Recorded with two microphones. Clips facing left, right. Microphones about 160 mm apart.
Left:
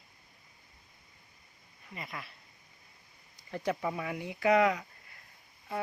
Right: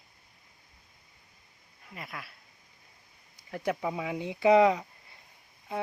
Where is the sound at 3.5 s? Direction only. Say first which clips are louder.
Right 2 dB; 10° right (ahead or behind).